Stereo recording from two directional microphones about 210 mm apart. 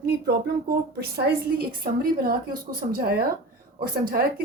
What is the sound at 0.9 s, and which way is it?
Speech, 45° right (ahead or behind).